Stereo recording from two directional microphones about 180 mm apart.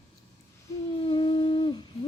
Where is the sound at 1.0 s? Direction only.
30° left (ahead or behind).